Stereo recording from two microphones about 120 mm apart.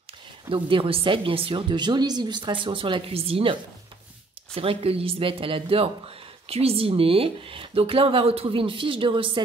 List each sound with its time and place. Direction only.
0.5 s speech: 45° right (ahead or behind)
4.6 s speech: 55° right (ahead or behind)